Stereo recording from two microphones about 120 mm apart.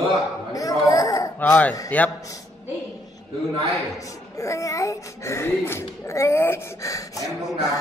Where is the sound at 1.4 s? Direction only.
10° left (ahead or behind).